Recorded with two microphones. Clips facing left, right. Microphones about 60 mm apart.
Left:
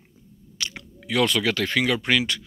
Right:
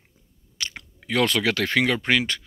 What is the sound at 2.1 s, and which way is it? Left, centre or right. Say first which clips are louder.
Speech: even; right.